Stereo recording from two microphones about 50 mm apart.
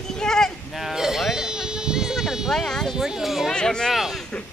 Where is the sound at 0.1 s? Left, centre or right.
Centre.